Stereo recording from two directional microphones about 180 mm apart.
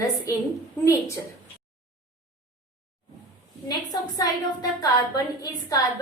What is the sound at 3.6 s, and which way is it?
A woman's voice, 20° left (ahead or behind).